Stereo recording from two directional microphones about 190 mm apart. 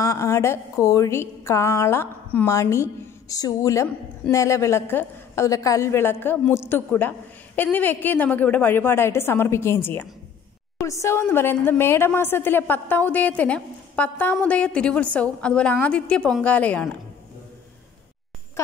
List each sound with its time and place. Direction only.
0.0 s a woman's voice: 15° left (ahead or behind)